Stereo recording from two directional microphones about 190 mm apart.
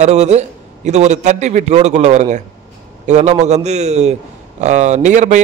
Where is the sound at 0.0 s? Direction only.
35° right (ahead or behind).